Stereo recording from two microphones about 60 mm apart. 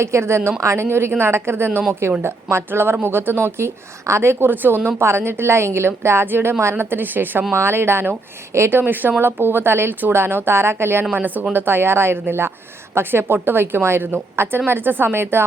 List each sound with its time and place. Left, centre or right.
0.0 s a woman's voice: right
3.4 s speech: right
4.9 s a woman's voice: right
7.5 s a woman's voice: right
8.8 s speech: right
11.1 s speech: right